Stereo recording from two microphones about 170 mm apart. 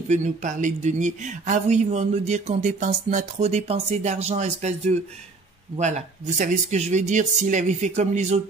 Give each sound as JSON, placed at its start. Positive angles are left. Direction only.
{"t": 0.1, "sound": "speech", "side_deg": -45}